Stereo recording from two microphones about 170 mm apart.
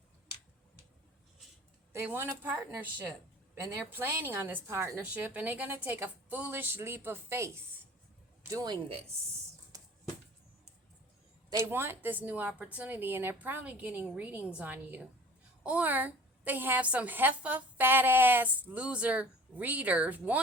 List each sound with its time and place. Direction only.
1.9 s a woman's voice: 15° right (ahead or behind)
9.7 s a sound: 20° right (ahead or behind)
11.6 s a woman's voice: 15° right (ahead or behind)